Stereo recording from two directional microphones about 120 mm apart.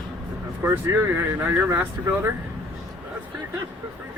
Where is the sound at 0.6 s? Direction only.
20° right (ahead or behind).